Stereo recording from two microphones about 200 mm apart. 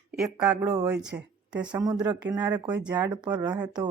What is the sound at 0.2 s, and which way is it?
Speech, 5° right (ahead or behind).